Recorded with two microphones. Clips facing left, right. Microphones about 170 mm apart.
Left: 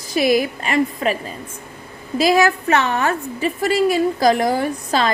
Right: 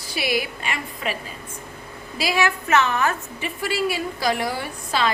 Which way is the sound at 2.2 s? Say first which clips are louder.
Left 7 dB; 40° left (ahead or behind).